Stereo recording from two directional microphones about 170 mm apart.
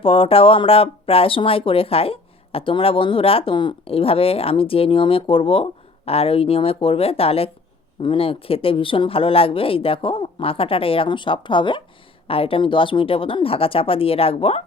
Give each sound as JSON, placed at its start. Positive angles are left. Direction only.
{"t": 0.0, "sound": "speech", "side_deg": 30}